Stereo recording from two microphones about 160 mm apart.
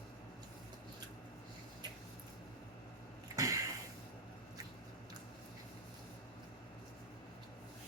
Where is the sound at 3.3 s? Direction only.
20° right (ahead or behind).